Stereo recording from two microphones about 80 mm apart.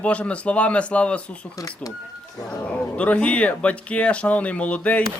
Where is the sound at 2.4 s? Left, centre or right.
Centre.